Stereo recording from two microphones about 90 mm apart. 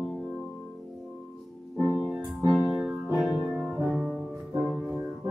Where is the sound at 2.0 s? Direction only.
Centre (ahead or behind).